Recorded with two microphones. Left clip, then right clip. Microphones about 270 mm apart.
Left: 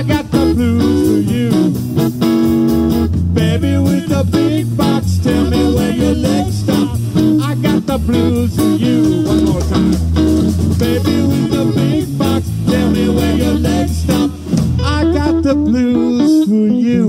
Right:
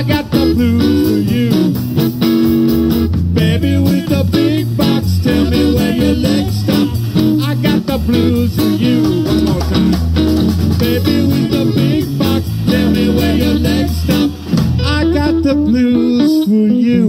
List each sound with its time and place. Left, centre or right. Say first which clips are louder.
0.1 s music: even; centre